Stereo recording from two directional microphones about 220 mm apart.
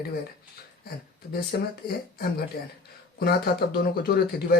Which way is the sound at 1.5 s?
45° left (ahead or behind).